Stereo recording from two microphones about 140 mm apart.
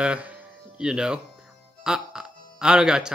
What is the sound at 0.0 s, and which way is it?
Speech, 10° right (ahead or behind).